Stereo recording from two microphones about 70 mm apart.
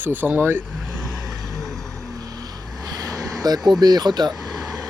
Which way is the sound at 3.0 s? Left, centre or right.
Right.